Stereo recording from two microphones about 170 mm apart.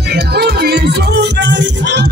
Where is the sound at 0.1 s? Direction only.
70° right (ahead or behind).